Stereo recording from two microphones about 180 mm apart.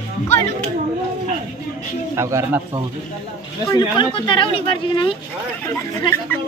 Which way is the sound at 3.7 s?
25° left (ahead or behind).